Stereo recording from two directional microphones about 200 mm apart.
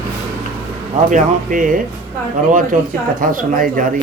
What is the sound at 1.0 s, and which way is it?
Speech, 40° right (ahead or behind).